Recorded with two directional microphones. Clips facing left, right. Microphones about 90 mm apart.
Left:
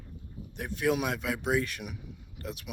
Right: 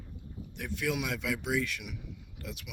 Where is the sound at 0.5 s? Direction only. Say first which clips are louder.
Left 5 dB; 40° left (ahead or behind).